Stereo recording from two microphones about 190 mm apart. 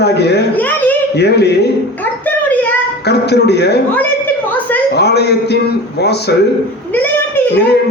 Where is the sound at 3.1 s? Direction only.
60° left (ahead or behind).